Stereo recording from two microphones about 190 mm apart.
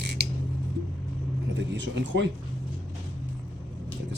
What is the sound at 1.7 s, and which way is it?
Speech, 70° right (ahead or behind).